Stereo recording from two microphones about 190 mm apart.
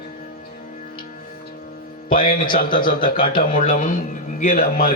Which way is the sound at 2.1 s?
45° left (ahead or behind).